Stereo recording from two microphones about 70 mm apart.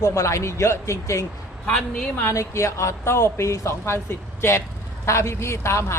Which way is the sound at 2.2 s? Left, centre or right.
Left.